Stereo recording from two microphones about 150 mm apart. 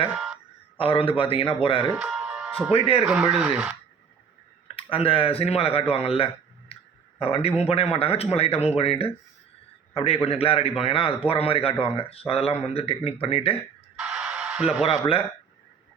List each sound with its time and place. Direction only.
0.8 s a man's voice: 40° left (ahead or behind)
2.0 s music: centre (ahead or behind)
2.7 s a man's voice: 40° left (ahead or behind)
3.1 s speech: 5° right (ahead or behind)
4.8 s a man's voice: 40° left (ahead or behind)
14.0 s music: centre (ahead or behind)
14.8 s a man's voice: 35° left (ahead or behind)